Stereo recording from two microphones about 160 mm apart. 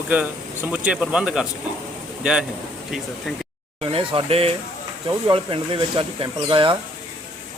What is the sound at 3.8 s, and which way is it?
Speech, 35° right (ahead or behind).